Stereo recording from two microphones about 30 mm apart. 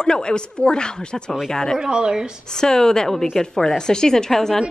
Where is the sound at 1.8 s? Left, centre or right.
Right.